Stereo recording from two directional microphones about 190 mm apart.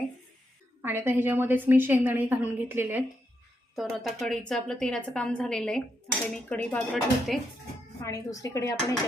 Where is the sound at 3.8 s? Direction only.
Centre (ahead or behind).